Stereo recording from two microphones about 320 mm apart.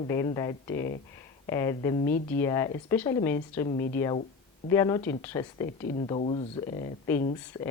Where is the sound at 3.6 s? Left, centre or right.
Left.